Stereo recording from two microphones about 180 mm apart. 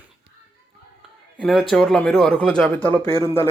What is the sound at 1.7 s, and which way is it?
Speech, centre (ahead or behind).